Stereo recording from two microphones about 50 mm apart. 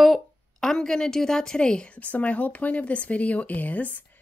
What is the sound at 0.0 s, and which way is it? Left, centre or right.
A woman's voice, centre.